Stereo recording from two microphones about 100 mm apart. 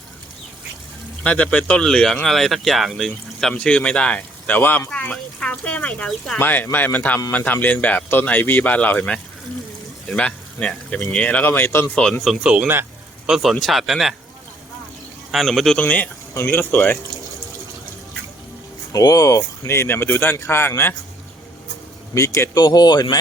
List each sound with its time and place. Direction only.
1.2 s speech: 15° left (ahead or behind)
3.5 s speech: 10° left (ahead or behind)
6.4 s speech: 20° left (ahead or behind)
12.2 s speech: 5° right (ahead or behind)
15.3 s speech: centre (ahead or behind)
15.8 s speech: 15° left (ahead or behind)
16.3 s speech: 30° left (ahead or behind)
16.6 s speech: 15° left (ahead or behind)
18.9 s speech: 35° left (ahead or behind)
22.1 s speech: 30° left (ahead or behind)
22.5 s speech: 45° left (ahead or behind)